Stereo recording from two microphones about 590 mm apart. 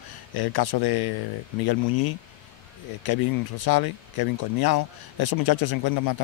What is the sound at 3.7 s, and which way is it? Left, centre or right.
Speech, left.